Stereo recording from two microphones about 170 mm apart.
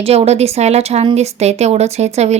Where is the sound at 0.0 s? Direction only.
40° right (ahead or behind).